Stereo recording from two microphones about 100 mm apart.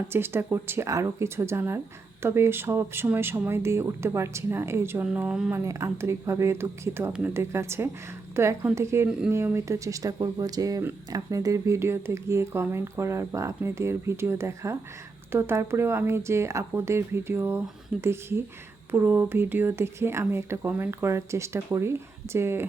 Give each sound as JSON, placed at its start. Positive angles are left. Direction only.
{"t": 0.1, "sound": "speech", "side_deg": -25}
{"t": 5.0, "sound": "speech", "side_deg": -10}
{"t": 5.5, "sound": "speech", "side_deg": -25}